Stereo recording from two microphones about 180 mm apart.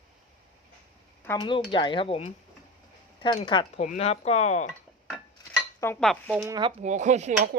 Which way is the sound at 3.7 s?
40° left (ahead or behind).